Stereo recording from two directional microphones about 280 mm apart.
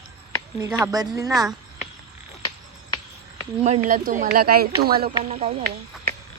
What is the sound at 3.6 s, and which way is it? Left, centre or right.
Speech, right.